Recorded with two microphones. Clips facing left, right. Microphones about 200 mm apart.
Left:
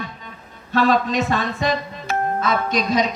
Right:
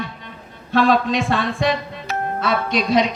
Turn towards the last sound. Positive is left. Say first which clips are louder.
# right 2 dB
turn(degrees=45)  # may be behind; listen again after turning